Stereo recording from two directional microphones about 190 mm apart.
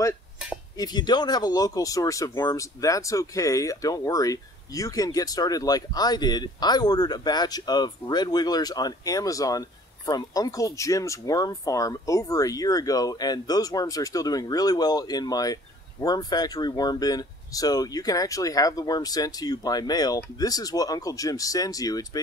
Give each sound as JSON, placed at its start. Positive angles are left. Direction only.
{"t": 0.7, "sound": "speech", "side_deg": 20}